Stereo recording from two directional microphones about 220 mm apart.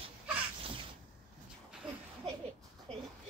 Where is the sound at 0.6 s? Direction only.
25° right (ahead or behind).